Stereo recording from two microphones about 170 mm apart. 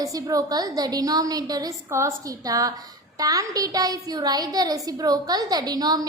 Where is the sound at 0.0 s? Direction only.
20° right (ahead or behind).